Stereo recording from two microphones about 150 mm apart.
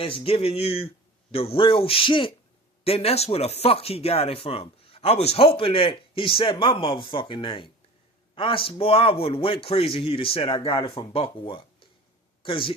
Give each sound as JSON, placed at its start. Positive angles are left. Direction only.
{"t": 0.0, "sound": "speech", "side_deg": 40}